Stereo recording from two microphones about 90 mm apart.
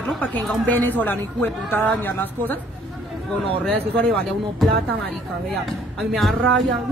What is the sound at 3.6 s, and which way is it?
Speech, 10° left (ahead or behind).